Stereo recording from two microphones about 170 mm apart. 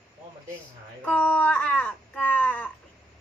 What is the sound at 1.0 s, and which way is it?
Speech, 5° left (ahead or behind).